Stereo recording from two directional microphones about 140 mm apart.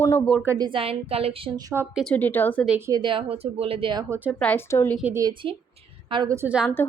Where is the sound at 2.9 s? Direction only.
35° right (ahead or behind).